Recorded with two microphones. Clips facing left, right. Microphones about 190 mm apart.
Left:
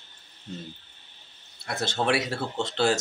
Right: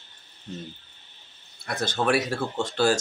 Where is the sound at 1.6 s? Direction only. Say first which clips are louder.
Right 1 dB; 25° left (ahead or behind).